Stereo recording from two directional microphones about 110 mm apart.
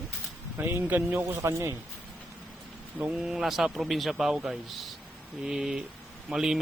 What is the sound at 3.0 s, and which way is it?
A man's voice, 5° right (ahead or behind).